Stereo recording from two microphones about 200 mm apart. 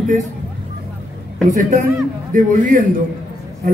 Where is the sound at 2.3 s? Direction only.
40° right (ahead or behind).